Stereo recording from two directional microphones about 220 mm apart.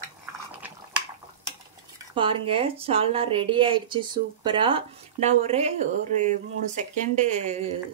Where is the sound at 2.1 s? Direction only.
25° right (ahead or behind).